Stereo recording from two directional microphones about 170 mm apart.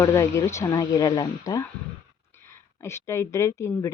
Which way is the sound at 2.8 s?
15° left (ahead or behind).